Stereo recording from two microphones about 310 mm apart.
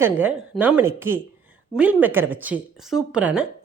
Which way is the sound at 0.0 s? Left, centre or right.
Centre.